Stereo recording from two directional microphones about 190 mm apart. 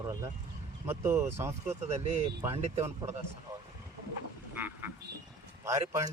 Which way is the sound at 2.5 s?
35° right (ahead or behind).